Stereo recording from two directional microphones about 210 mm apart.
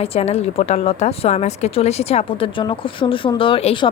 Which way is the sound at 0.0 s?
30° left (ahead or behind).